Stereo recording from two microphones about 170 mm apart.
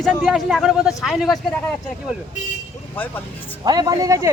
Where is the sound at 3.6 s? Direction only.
25° right (ahead or behind).